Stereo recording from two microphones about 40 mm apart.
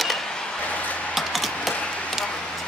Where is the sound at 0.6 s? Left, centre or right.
Left.